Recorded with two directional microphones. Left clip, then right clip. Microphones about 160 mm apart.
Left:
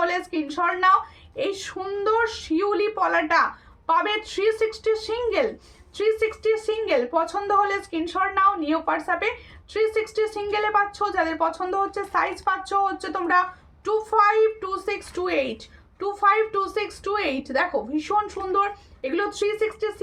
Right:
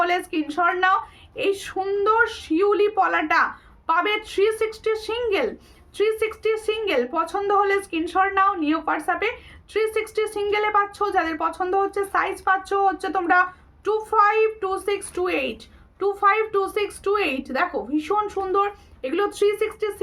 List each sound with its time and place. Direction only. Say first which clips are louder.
0.0 s a woman's voice: right 2 dB; 20° right (ahead or behind)